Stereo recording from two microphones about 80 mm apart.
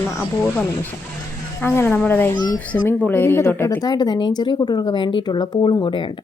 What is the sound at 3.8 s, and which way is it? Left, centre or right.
Speech, left.